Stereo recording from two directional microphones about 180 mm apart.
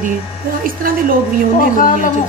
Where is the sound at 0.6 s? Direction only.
50° right (ahead or behind).